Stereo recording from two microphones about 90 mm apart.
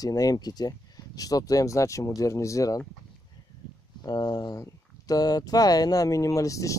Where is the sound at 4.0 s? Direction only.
55° left (ahead or behind).